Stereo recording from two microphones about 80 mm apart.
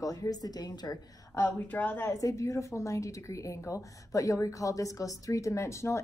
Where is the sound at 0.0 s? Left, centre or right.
Left.